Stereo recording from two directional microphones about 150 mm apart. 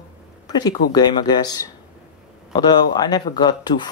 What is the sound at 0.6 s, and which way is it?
Speech, 25° left (ahead or behind).